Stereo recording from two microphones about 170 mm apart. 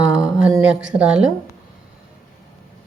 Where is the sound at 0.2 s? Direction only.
Centre (ahead or behind).